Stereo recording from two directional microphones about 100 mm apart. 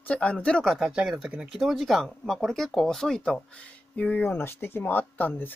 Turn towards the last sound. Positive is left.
turn(degrees=20)  # may be behind; listen again after turning